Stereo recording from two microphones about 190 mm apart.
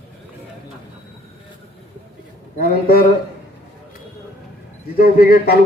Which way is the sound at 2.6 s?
50° left (ahead or behind).